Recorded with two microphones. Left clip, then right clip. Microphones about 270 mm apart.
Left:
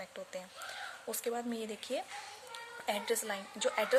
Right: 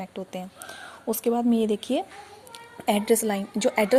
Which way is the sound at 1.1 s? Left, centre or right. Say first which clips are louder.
Right 14 dB; right.